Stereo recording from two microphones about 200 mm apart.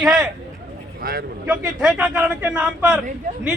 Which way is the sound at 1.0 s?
45° right (ahead or behind).